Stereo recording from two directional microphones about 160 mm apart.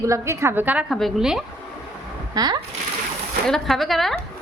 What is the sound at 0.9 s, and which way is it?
Speech, centre (ahead or behind).